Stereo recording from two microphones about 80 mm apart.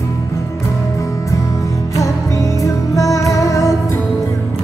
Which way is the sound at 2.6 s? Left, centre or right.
Left.